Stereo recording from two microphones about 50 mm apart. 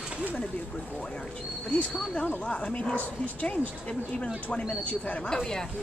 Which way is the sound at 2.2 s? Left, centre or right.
Left.